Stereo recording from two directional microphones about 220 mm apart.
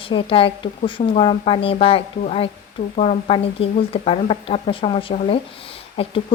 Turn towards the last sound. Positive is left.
turn(degrees=30)  # may be behind; listen again after turning